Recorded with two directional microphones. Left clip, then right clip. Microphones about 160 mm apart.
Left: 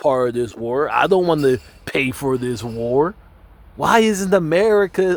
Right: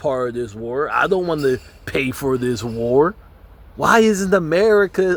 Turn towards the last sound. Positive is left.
turn(degrees=20)  # may be behind; listen again after turning